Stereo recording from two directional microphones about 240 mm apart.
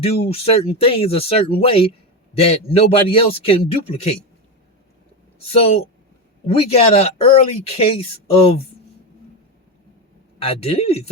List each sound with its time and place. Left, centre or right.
0.0 s speech: left
5.5 s speech: left
10.4 s speech: left